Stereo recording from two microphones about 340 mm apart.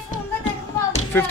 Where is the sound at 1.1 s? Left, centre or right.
Centre.